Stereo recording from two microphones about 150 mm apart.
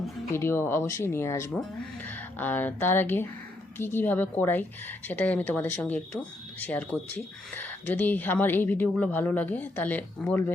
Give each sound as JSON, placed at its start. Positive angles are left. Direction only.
{"t": 0.3, "sound": "a woman's voice", "side_deg": 15}